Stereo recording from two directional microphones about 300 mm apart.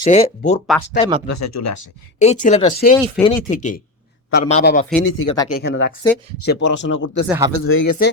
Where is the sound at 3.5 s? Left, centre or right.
Left.